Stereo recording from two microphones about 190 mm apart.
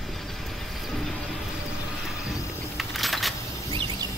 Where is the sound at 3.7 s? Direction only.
25° right (ahead or behind).